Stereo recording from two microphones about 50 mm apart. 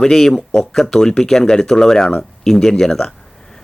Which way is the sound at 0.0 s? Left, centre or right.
Centre.